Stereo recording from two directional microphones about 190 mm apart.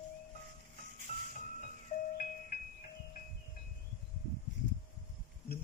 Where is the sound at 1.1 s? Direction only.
30° left (ahead or behind).